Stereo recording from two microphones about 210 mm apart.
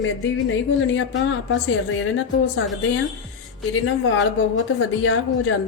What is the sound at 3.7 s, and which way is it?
A woman's voice, 65° left (ahead or behind).